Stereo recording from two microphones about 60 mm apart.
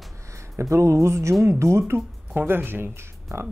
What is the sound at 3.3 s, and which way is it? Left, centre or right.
Speech, right.